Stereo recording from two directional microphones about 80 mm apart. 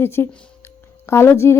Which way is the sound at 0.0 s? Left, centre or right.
Left.